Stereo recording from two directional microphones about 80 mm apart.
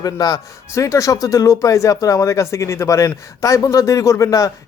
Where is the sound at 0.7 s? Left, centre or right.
Left.